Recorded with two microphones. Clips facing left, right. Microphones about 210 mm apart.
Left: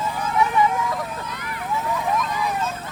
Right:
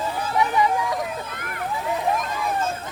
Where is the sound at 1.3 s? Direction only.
50° right (ahead or behind).